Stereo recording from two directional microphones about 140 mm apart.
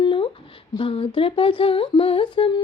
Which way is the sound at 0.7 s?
40° left (ahead or behind).